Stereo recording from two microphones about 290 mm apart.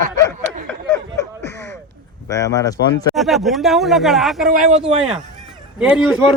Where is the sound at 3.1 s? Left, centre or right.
Centre.